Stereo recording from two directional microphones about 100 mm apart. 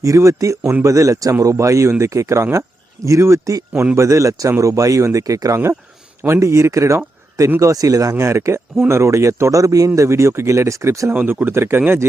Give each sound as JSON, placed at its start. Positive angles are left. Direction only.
{"t": 0.0, "sound": "speech", "side_deg": -30}
{"t": 11.1, "sound": "speech", "side_deg": -15}